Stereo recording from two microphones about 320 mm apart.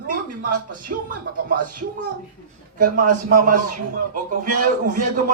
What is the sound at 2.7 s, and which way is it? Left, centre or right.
A man's voice, right.